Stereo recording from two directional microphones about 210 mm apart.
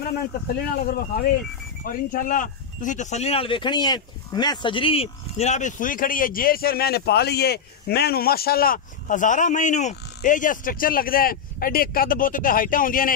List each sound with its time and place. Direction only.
0.8 s speech: 45° left (ahead or behind)